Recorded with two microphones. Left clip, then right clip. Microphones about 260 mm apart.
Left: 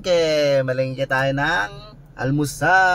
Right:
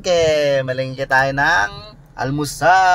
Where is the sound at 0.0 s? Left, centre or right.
Centre.